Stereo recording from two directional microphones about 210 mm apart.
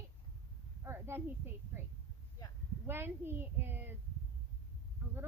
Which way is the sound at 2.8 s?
10° right (ahead or behind).